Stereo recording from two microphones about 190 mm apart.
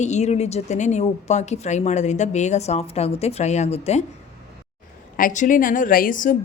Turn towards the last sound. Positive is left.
turn(degrees=45)  # may be behind; listen again after turning